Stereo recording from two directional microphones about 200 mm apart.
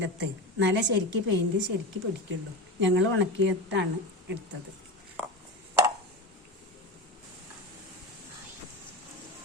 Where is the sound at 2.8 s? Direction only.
65° right (ahead or behind).